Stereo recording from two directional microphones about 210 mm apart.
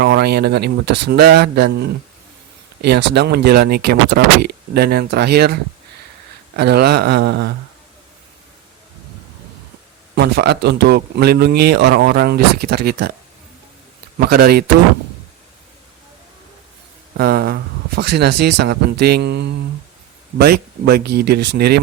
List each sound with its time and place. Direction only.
0.0 s speech: 50° right (ahead or behind)
6.6 s speech: 50° right (ahead or behind)
10.2 s speech: 50° right (ahead or behind)
14.2 s speech: 50° right (ahead or behind)
17.2 s speech: 45° right (ahead or behind)